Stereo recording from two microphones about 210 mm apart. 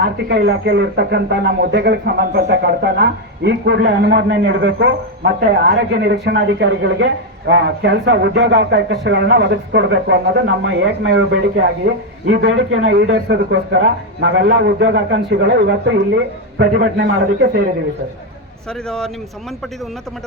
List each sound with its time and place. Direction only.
0.3 s speech: 55° right (ahead or behind)
18.7 s speech: centre (ahead or behind)